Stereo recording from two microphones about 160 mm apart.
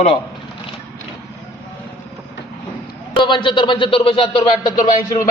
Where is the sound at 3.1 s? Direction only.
30° left (ahead or behind).